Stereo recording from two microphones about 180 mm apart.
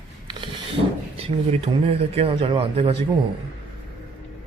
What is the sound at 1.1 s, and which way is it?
Speech, 35° right (ahead or behind).